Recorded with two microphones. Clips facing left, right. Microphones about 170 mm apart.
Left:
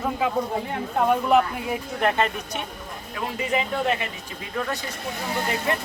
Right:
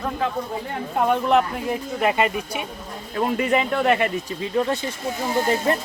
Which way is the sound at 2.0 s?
10° right (ahead or behind).